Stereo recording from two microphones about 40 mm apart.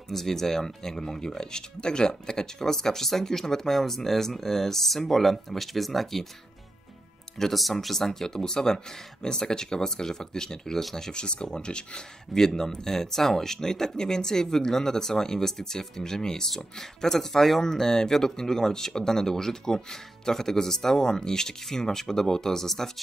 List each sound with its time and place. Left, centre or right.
0.1 s speech: centre
7.3 s speech: centre